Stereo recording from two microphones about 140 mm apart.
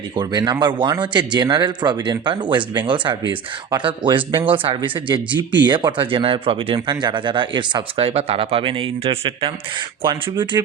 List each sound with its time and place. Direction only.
0.2 s speech: 30° right (ahead or behind)
7.9 s speech: 45° right (ahead or behind)